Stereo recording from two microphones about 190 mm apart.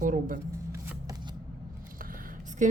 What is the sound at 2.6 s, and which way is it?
Speech, 40° right (ahead or behind).